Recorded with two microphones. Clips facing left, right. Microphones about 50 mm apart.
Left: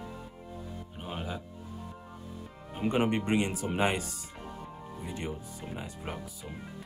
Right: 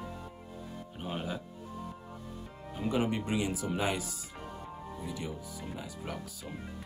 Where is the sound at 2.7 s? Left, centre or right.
Left.